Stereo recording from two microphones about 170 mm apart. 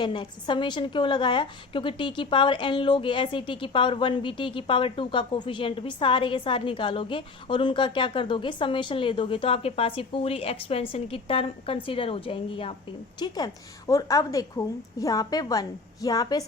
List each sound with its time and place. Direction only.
0.0 s a woman's voice: 30° left (ahead or behind)